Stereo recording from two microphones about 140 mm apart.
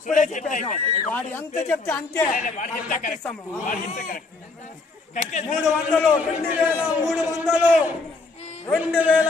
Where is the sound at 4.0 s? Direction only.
90° left.